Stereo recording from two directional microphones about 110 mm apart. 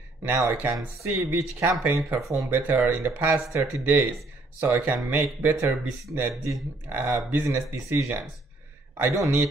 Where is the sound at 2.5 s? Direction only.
15° right (ahead or behind).